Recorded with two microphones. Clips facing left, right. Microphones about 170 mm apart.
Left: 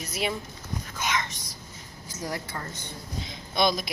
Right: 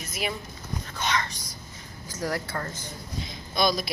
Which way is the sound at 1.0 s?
15° left (ahead or behind).